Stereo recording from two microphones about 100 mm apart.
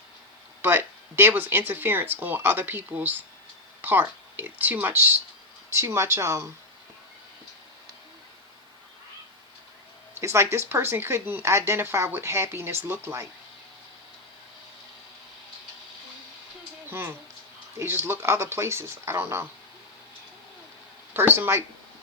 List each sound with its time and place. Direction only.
0.6 s speech: 25° right (ahead or behind)
10.2 s speech: 25° right (ahead or behind)
16.9 s speech: 25° right (ahead or behind)
21.1 s speech: 20° right (ahead or behind)